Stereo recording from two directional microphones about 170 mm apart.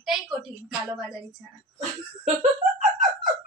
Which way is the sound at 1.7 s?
40° right (ahead or behind).